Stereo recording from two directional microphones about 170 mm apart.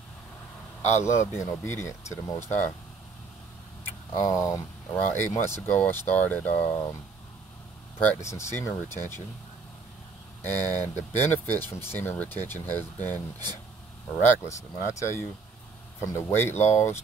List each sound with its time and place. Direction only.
1.0 s speech: 15° left (ahead or behind)
4.1 s speech: 20° left (ahead or behind)
8.0 s speech: 15° left (ahead or behind)
10.4 s speech: 10° left (ahead or behind)
14.4 s speech: 20° left (ahead or behind)